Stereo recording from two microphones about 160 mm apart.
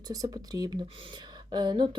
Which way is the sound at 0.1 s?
25° right (ahead or behind).